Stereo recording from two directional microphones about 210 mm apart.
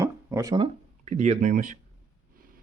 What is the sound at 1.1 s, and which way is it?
Speech, 35° right (ahead or behind).